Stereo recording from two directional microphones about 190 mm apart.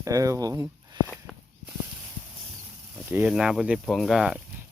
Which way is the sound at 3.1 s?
10° right (ahead or behind).